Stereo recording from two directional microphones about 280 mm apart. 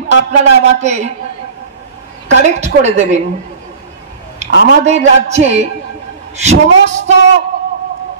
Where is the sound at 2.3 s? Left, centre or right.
Right.